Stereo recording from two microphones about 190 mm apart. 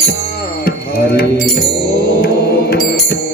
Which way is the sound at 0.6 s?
55° left (ahead or behind).